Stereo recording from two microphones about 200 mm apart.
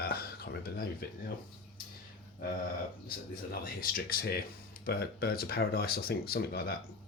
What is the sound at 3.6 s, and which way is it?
Speech, 45° left (ahead or behind).